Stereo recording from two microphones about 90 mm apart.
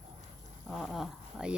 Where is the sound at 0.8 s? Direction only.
Centre (ahead or behind).